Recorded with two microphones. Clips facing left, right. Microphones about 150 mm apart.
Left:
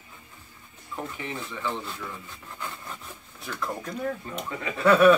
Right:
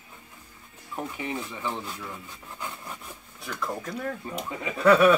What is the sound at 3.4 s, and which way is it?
Speech, 5° left (ahead or behind).